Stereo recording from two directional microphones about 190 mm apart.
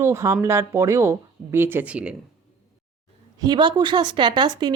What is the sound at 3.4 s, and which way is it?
A woman's voice, 20° right (ahead or behind).